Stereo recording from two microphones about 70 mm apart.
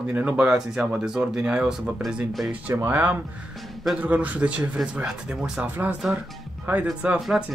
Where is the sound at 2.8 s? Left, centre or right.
Right.